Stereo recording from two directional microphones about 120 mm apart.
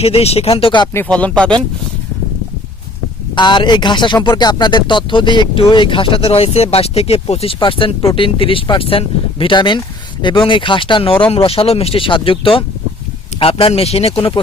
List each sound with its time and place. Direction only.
0.0 s speech: 60° left (ahead or behind)
0.9 s speech: 10° left (ahead or behind)
3.3 s speech: 40° left (ahead or behind)